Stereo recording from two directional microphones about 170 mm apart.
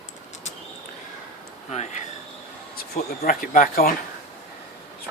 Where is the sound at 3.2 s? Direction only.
55° left (ahead or behind).